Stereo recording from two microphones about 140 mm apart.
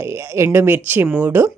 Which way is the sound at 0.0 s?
20° right (ahead or behind).